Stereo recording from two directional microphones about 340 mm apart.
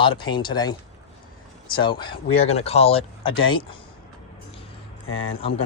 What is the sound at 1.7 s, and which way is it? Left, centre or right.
Speech, centre.